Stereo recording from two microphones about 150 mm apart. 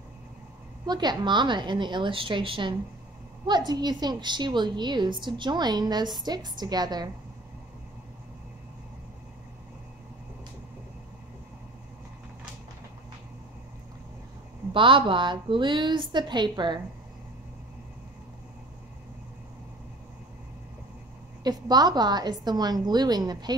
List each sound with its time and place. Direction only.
0.8 s a woman's voice: 30° right (ahead or behind)
14.7 s a woman's voice: 35° right (ahead or behind)
21.5 s a woman's voice: 25° right (ahead or behind)